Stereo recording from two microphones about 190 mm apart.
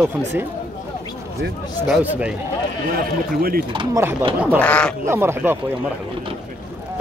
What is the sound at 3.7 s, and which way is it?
Speech, 15° right (ahead or behind).